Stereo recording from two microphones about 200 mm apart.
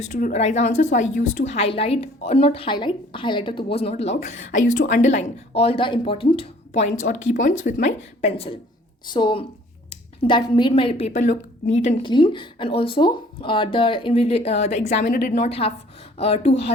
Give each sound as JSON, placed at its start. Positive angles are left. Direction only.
{"t": 0.1, "sound": "a woman's voice", "side_deg": 40}